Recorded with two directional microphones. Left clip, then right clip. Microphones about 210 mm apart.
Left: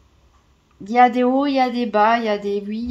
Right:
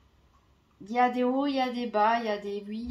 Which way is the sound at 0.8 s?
40° left (ahead or behind).